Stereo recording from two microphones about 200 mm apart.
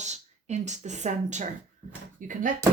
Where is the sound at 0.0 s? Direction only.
35° right (ahead or behind).